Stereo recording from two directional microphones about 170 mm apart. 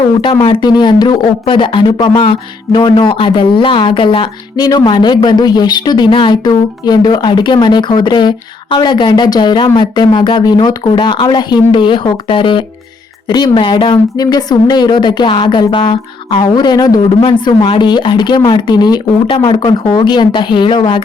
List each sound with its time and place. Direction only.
0.2 s speech: 30° left (ahead or behind)